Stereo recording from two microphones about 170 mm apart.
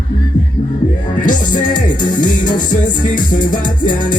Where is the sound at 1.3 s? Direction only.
50° left (ahead or behind).